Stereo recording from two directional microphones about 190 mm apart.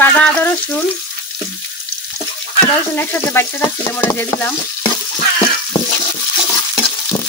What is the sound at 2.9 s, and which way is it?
Frying, 10° left (ahead or behind).